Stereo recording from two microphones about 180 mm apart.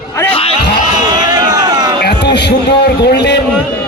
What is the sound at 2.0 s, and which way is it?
A man's voice, 70° left (ahead or behind).